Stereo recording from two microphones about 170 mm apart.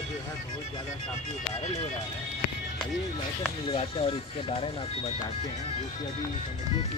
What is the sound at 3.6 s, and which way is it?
Speech, 35° left (ahead or behind).